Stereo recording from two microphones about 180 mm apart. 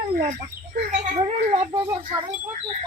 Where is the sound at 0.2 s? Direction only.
45° right (ahead or behind).